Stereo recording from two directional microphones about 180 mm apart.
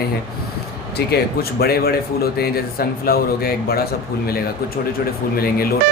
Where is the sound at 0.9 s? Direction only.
60° left (ahead or behind).